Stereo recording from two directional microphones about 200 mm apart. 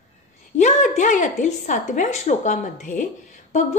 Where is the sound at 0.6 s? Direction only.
40° left (ahead or behind).